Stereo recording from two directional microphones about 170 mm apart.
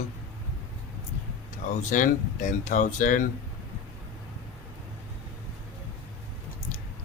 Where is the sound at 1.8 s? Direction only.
50° left (ahead or behind).